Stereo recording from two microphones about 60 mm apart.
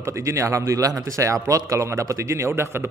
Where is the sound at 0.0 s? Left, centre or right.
Right.